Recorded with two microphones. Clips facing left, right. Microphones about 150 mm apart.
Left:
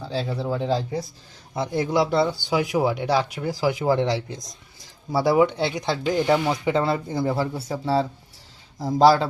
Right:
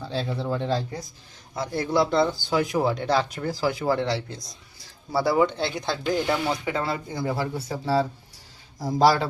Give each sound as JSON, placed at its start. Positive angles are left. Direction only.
{"t": 0.0, "sound": "speech", "side_deg": 5}